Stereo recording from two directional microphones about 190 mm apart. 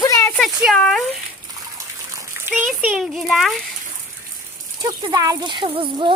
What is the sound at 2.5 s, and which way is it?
Speech, 10° right (ahead or behind).